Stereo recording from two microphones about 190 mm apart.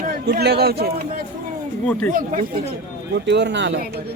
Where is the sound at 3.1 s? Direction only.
65° right (ahead or behind).